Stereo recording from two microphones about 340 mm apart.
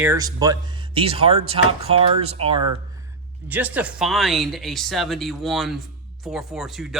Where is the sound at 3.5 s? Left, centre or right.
Centre.